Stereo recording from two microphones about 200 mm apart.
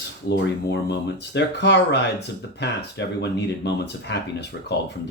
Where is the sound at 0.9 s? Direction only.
60° left (ahead or behind).